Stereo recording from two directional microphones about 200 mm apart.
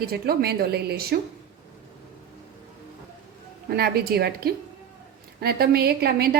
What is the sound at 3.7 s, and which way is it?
A woman's voice, 50° right (ahead or behind).